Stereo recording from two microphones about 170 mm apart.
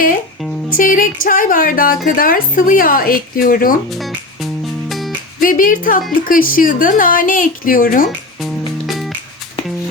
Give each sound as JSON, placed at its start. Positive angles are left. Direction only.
{"t": 0.7, "sound": "speech", "side_deg": 55}
{"t": 3.9, "sound": "music", "side_deg": 0}
{"t": 5.4, "sound": "music", "side_deg": 55}
{"t": 6.2, "sound": "speech", "side_deg": 55}